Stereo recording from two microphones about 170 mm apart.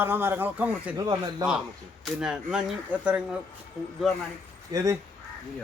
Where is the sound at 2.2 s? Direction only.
5° right (ahead or behind).